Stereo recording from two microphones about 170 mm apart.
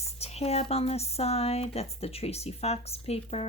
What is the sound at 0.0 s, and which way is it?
Speech, 35° left (ahead or behind).